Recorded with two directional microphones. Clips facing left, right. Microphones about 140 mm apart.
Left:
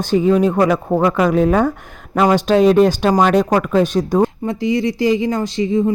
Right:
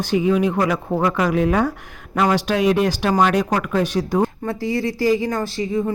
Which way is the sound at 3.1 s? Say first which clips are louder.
Left 3 dB; 40° left (ahead or behind).